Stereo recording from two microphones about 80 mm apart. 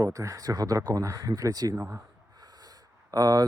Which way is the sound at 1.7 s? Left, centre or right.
Right.